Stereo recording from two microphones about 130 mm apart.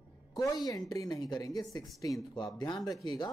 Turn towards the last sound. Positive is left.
turn(degrees=30)  # may be behind; listen again after turning